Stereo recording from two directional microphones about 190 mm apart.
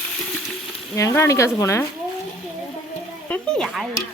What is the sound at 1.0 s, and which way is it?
Speech, 15° left (ahead or behind).